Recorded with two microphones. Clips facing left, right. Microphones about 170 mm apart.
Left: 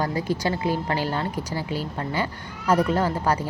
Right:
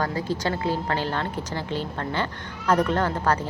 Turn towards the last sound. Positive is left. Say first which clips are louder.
# left 1 dB
turn(degrees=10)  # may be behind; listen again after turning